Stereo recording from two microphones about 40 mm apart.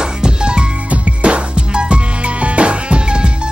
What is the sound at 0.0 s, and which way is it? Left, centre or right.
Music, right.